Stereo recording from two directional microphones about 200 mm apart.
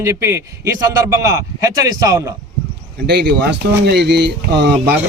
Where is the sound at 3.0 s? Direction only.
55° right (ahead or behind).